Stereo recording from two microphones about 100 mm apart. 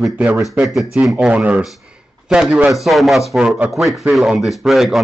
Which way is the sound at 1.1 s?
15° right (ahead or behind).